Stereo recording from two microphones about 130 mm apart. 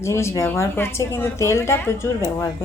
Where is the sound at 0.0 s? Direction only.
20° left (ahead or behind).